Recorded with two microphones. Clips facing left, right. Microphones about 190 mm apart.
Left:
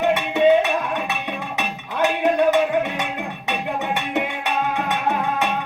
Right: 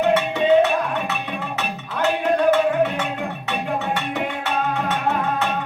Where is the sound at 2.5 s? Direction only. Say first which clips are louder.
Right 1 dB; 15° left (ahead or behind).